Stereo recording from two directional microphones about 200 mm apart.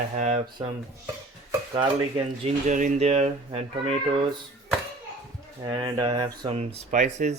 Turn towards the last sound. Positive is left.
turn(degrees=-35)  # may be behind; listen again after turning